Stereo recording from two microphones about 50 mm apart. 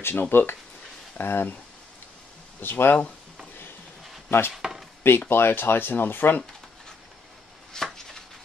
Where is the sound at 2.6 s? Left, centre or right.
Left.